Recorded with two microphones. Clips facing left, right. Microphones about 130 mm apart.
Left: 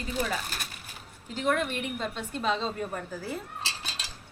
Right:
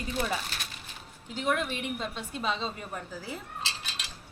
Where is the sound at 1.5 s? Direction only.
5° right (ahead or behind).